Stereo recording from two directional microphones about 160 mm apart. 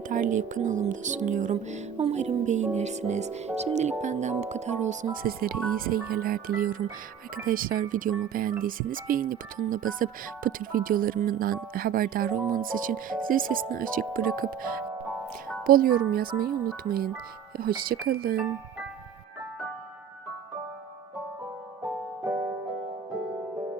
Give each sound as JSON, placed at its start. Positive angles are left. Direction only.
{"t": 0.1, "sound": "speech", "side_deg": -55}